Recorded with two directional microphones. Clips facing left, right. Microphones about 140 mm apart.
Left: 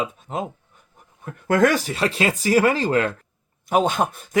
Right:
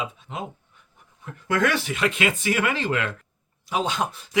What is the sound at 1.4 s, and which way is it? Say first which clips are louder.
Speech: left 5 dB; 45° left (ahead or behind).